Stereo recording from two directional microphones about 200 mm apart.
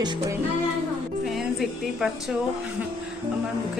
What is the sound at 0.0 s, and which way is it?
Speech, 20° right (ahead or behind).